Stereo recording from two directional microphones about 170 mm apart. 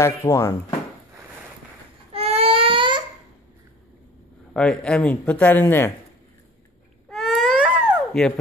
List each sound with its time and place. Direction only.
0.0 s speech: 20° left (ahead or behind)
2.1 s baby cry: 35° right (ahead or behind)
4.6 s speech: 5° left (ahead or behind)
7.1 s baby cry: centre (ahead or behind)